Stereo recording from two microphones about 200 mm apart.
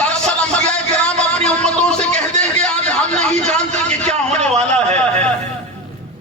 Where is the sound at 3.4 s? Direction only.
35° right (ahead or behind).